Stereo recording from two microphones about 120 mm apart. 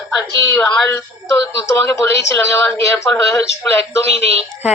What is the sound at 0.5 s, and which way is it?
A woman's voice, 30° left (ahead or behind).